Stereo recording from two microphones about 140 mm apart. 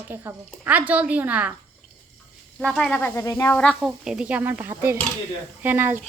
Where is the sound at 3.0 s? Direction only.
20° left (ahead or behind).